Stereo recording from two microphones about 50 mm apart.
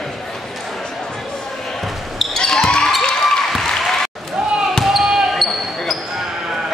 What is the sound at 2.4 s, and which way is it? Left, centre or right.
Basketball bounce, centre.